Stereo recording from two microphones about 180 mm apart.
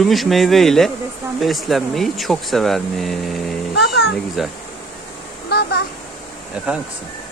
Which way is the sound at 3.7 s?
70° left (ahead or behind).